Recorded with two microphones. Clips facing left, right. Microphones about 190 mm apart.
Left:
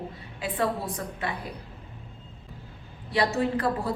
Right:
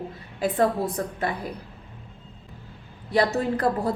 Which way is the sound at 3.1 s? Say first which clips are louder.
Right 3 dB; 45° right (ahead or behind).